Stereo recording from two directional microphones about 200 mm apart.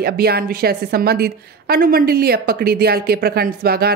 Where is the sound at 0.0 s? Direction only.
50° right (ahead or behind).